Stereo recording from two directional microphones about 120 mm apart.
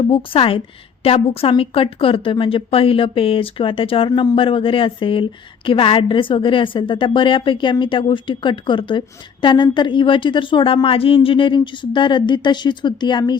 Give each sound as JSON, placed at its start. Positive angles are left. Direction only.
{"t": 0.0, "sound": "speech", "side_deg": 45}